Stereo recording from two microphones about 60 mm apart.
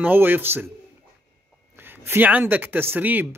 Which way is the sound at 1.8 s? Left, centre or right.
Right.